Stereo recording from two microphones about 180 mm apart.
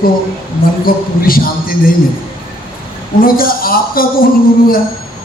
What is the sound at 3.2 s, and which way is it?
Speech, 55° left (ahead or behind).